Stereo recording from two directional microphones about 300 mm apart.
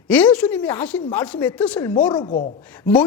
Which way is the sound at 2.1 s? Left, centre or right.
Centre.